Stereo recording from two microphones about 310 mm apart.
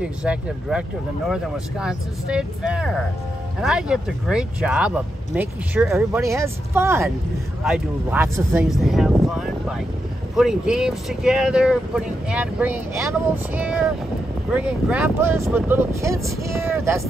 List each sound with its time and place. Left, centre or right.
0.0 s speech: centre